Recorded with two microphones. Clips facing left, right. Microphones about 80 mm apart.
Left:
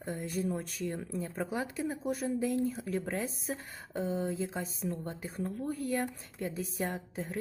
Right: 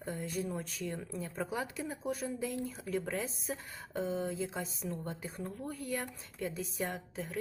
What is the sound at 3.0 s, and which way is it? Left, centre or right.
Speech, centre.